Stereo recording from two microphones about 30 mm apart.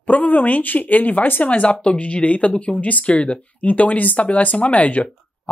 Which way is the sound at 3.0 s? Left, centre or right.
Left.